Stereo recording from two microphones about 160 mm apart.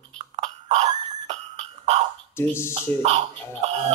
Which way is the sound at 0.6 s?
45° right (ahead or behind).